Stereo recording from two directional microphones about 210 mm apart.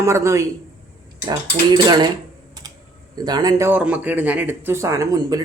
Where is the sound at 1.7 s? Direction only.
20° right (ahead or behind).